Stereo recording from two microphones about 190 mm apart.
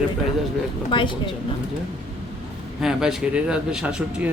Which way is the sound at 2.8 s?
5° right (ahead or behind).